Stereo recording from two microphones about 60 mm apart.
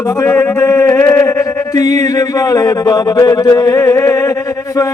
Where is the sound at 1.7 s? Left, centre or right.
Left.